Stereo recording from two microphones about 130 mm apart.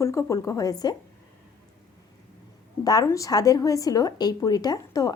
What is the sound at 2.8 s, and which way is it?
A woman's voice, 25° left (ahead or behind).